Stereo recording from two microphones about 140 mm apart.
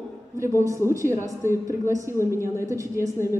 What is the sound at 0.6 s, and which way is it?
A woman's voice, 20° right (ahead or behind).